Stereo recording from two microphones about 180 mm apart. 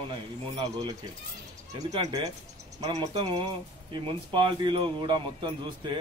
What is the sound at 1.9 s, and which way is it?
Speech, 20° right (ahead or behind).